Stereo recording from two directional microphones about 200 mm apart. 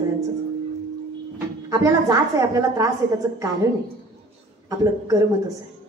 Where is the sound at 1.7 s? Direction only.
20° right (ahead or behind).